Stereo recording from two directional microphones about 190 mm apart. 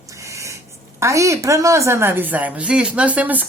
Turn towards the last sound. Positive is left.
turn(degrees=-10)  # may be behind; listen again after turning